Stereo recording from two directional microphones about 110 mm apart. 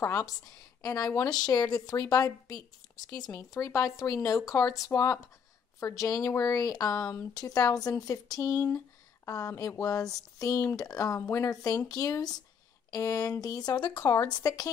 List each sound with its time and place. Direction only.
0.0 s a woman's voice: 25° left (ahead or behind)